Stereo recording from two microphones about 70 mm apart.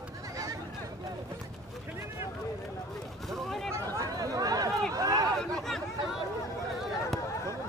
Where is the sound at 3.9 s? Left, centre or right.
Right.